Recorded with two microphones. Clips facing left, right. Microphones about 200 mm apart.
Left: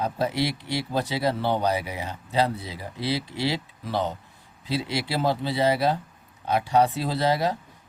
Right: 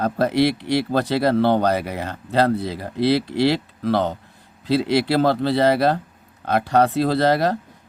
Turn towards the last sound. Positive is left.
turn(degrees=-70)  # may be behind; listen again after turning